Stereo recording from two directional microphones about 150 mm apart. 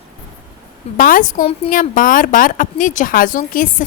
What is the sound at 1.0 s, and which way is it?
Speech, 65° left (ahead or behind).